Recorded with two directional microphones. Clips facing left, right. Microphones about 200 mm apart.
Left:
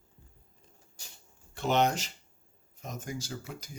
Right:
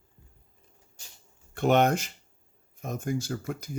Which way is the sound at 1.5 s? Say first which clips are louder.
Right 5 dB; 55° right (ahead or behind).